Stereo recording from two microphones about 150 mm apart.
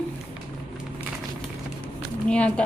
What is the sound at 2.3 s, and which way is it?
Speech, 5° left (ahead or behind).